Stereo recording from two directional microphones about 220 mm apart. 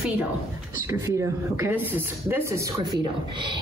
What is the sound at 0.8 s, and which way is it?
Speech, 15° right (ahead or behind).